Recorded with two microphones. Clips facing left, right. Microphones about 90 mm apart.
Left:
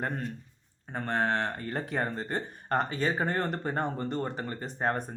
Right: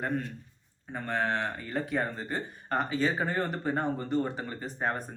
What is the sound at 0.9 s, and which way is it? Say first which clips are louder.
Speech: left 1 dB; 45° left (ahead or behind).